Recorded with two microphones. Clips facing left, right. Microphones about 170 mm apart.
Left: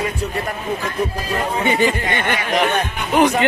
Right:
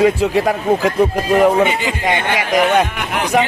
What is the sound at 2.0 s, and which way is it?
Speech, 85° right.